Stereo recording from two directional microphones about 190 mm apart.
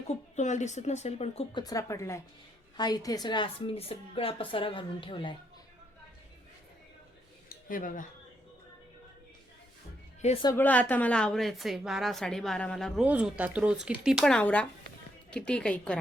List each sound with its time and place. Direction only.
0.3 s speech: 40° left (ahead or behind)
1.6 s speech: 15° left (ahead or behind)
7.5 s a sound: 45° left (ahead or behind)
10.2 s a woman's voice: 35° left (ahead or behind)
10.4 s a woman's voice: 10° left (ahead or behind)